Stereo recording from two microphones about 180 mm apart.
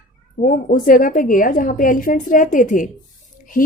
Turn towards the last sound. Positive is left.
turn(degrees=50)  # may be behind; listen again after turning